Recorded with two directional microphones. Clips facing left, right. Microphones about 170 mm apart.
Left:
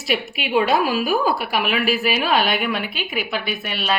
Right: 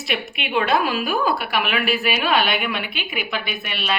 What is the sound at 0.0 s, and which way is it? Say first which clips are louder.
A woman's voice: left 3 dB; 5° left (ahead or behind).